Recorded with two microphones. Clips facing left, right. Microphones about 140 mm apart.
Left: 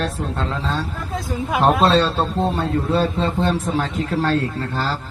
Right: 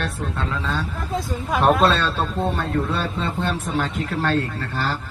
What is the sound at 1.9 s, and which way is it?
Speech, 35° left (ahead or behind).